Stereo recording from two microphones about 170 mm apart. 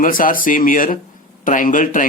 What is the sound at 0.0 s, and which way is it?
A man's voice, 55° left (ahead or behind).